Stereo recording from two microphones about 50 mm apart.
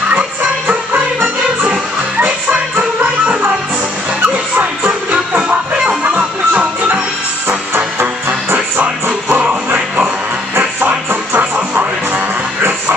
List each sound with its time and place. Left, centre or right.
1.6 s music: right
4.6 s music: right
7.4 s music: right
10.8 s music: right